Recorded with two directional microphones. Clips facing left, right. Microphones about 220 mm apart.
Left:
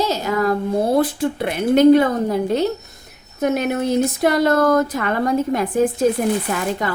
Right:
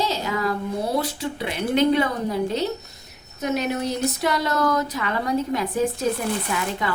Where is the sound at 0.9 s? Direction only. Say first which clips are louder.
Left 7 dB; 55° left (ahead or behind).